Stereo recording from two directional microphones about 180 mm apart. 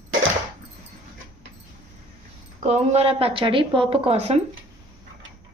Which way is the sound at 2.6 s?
40° right (ahead or behind).